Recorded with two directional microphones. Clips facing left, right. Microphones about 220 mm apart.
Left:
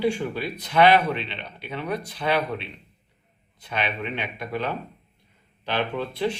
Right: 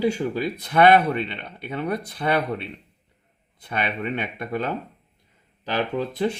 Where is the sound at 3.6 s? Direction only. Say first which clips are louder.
Right 1 dB; 55° right (ahead or behind).